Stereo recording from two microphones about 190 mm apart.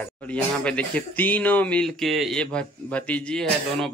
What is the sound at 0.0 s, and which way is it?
Speech, 5° left (ahead or behind).